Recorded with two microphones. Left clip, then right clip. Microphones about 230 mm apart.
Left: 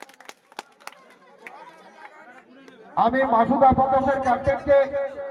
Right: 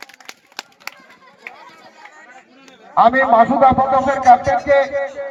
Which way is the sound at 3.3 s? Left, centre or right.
Right.